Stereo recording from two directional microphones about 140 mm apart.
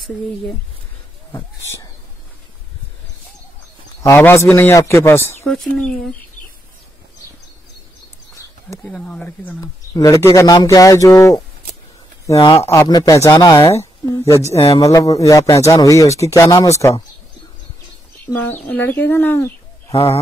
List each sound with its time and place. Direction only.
4.0 s speech: 20° left (ahead or behind)
5.8 s speech: 5° left (ahead or behind)
8.8 s speech: 5° left (ahead or behind)
9.6 s speech: 25° left (ahead or behind)
18.2 s speech: 10° left (ahead or behind)
19.9 s speech: 45° left (ahead or behind)